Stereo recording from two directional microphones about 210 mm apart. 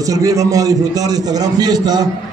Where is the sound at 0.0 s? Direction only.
15° right (ahead or behind).